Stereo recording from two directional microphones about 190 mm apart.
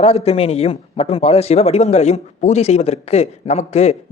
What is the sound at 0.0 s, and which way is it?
Speech, 35° left (ahead or behind).